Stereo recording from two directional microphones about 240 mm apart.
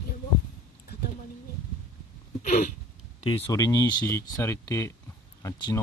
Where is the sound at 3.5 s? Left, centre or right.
Centre.